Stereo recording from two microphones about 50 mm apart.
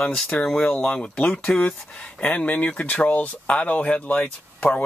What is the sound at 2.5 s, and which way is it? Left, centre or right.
Speech, left.